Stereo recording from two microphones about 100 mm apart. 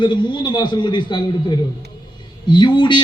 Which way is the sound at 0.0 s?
50° left (ahead or behind).